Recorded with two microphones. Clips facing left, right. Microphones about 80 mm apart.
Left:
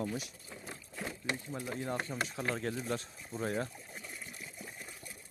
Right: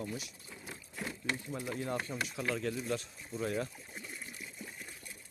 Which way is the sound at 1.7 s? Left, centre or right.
Left.